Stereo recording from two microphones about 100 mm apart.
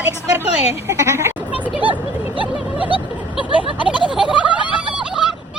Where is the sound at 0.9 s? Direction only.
25° right (ahead or behind).